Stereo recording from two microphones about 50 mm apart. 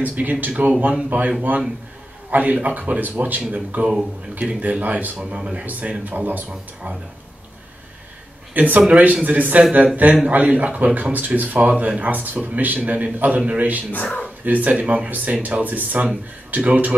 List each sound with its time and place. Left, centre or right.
0.0 s a man's voice: right
2.3 s a man's voice: right
5.7 s speech: right
6.5 s speech: centre
8.5 s a man's voice: right